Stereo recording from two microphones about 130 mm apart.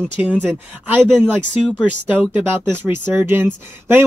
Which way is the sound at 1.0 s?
Centre (ahead or behind).